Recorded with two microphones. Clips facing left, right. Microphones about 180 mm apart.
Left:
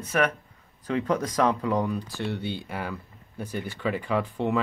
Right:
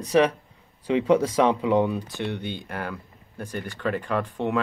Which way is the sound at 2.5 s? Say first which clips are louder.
Right 1 dB; 5° left (ahead or behind).